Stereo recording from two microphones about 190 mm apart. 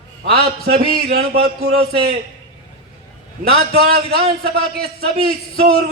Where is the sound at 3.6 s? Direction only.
55° right (ahead or behind).